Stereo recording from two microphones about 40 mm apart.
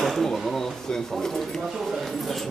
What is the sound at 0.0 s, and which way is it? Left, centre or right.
Drawer open or close, centre.